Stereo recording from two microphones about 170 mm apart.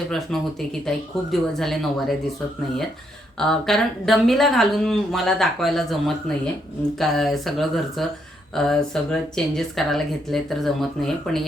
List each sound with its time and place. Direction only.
0.1 s speech: centre (ahead or behind)
3.3 s speech: 5° left (ahead or behind)